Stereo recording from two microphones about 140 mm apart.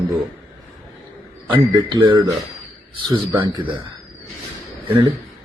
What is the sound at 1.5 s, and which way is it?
Speech, 35° right (ahead or behind).